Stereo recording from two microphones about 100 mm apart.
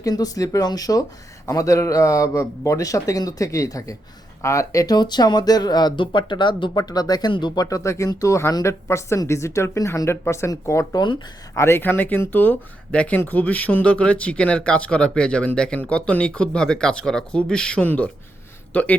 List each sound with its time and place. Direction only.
0.0 s speech: 40° left (ahead or behind); by 18.9 s 15° left (ahead or behind)